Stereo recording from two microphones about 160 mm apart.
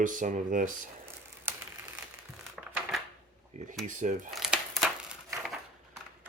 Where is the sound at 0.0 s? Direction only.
55° right (ahead or behind).